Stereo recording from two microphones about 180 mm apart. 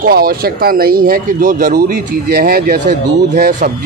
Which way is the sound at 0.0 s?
55° right (ahead or behind).